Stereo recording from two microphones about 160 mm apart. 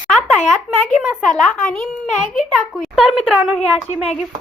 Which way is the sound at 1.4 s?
5° left (ahead or behind).